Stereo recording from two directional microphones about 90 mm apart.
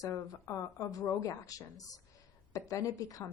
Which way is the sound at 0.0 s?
40° left (ahead or behind).